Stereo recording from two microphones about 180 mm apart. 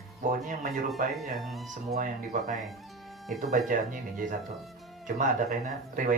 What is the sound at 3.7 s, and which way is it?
Speech, 45° right (ahead or behind).